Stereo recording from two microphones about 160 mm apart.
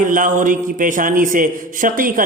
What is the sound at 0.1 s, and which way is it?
A man's voice, 55° right (ahead or behind).